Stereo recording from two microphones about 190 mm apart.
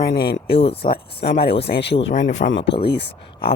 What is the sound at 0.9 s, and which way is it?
Speech, 55° left (ahead or behind).